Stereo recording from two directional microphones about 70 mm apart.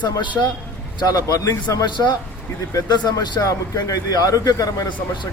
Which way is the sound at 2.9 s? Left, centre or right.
Left.